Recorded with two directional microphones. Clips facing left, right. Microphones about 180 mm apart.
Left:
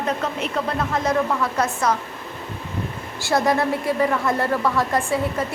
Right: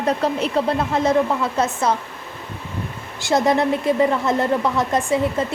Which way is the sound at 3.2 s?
20° right (ahead or behind).